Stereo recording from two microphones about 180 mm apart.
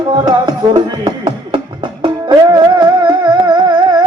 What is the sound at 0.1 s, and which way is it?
Music, 20° right (ahead or behind).